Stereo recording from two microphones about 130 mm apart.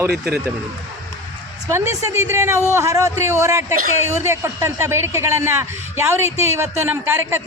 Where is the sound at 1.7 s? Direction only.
20° right (ahead or behind).